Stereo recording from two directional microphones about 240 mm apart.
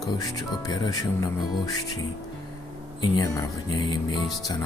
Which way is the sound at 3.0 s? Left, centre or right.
Centre.